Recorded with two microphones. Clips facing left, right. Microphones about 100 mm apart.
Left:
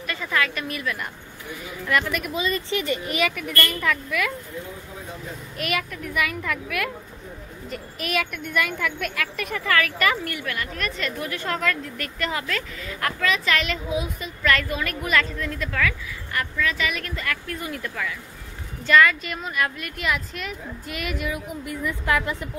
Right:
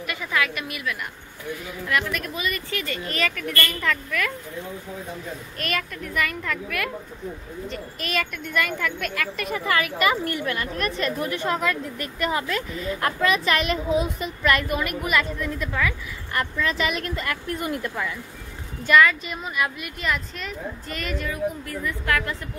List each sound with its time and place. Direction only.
0.0 s a woman's voice: 10° right (ahead or behind)
2.3 s a woman's voice: 25° left (ahead or behind); by 4.3 s 5° left (ahead or behind)
5.6 s a woman's voice: 5° left (ahead or behind)
9.5 s a woman's voice: 20° right (ahead or behind)
10.2 s a woman's voice: 30° right (ahead or behind)
16.3 s a woman's voice: 25° right (ahead or behind)
18.9 s speech: 5° right (ahead or behind)
20.0 s a woman's voice: 5° left (ahead or behind)